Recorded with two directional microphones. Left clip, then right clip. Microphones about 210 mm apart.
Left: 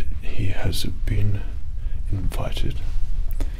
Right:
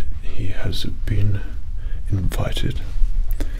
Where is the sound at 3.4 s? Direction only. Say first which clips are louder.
Right 4 dB; 50° right (ahead or behind).